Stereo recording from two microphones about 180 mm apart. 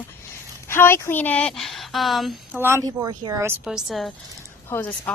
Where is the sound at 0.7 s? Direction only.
15° left (ahead or behind).